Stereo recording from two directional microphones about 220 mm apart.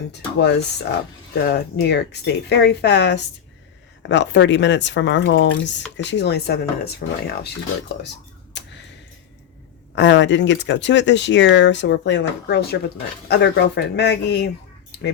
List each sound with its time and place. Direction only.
0.1 s speech: 50° left (ahead or behind)
9.9 s speech: 55° left (ahead or behind)